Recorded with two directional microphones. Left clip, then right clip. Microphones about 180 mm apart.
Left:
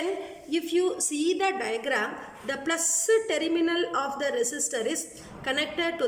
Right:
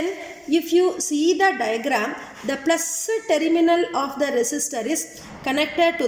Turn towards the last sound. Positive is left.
turn(degrees=-30)  # may be behind; listen again after turning